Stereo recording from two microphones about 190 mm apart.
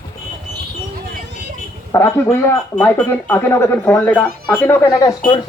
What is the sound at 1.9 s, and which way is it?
Speech, 15° left (ahead or behind).